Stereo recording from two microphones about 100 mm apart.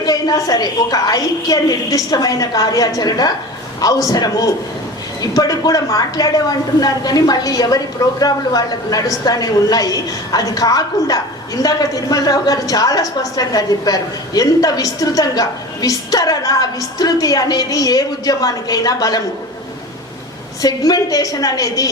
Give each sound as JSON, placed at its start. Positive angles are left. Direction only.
{"t": 0.0, "sound": "a woman's voice", "side_deg": 40}
{"t": 20.6, "sound": "a woman's voice", "side_deg": 40}